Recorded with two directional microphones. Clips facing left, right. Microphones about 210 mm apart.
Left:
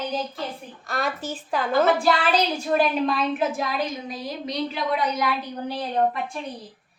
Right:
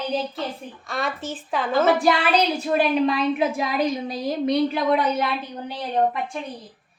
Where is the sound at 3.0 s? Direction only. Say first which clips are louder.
Right 3 dB; 10° right (ahead or behind).